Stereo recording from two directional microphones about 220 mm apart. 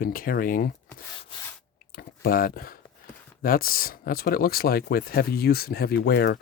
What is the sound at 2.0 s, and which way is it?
Speech, 40° left (ahead or behind).